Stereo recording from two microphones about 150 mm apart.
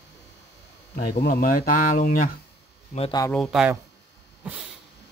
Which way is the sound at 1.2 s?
85° left.